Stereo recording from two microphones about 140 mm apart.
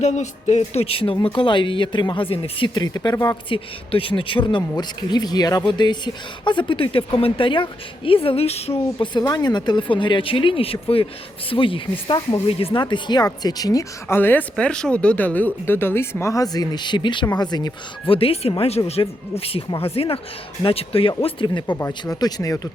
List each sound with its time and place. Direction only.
0.0 s speech: 55° left (ahead or behind); by 3.6 s 30° left (ahead or behind)
3.9 s speech: 40° left (ahead or behind)
9.1 s speech: 30° left (ahead or behind)
14.2 s speech: 15° left (ahead or behind)